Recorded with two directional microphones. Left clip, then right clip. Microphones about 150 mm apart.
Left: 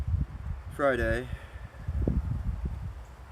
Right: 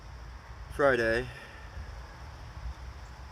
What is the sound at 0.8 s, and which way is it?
Speech, 20° left (ahead or behind).